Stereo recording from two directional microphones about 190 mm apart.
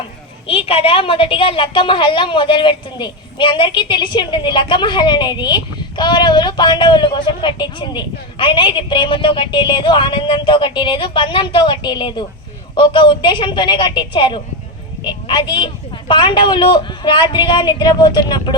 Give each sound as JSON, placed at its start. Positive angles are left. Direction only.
{"t": 0.4, "sound": "a woman's voice", "side_deg": 30}